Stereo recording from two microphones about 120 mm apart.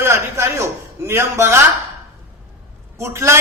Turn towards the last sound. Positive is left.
turn(degrees=-20)  # may be behind; listen again after turning